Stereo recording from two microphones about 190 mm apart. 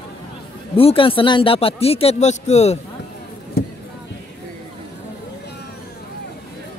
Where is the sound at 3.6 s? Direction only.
55° left (ahead or behind).